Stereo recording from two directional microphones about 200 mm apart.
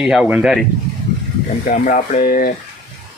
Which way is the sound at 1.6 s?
40° left (ahead or behind).